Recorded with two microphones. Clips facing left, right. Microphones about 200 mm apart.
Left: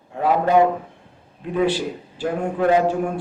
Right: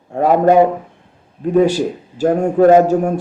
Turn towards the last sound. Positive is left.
turn(degrees=-45)  # may be behind; listen again after turning